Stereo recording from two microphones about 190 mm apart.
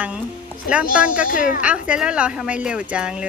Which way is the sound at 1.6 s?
5° right (ahead or behind).